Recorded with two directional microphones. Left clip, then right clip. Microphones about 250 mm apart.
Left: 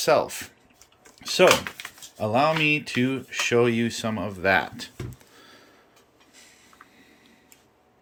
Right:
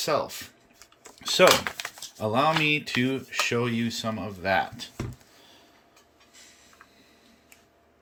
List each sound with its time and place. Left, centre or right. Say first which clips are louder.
0.0 s speech: left 6 dB; centre
1.6 s a sound: right 3 dB; centre
2.1 s speech: left 2 dB; centre